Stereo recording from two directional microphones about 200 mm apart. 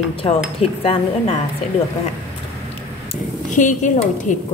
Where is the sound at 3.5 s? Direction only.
40° left (ahead or behind).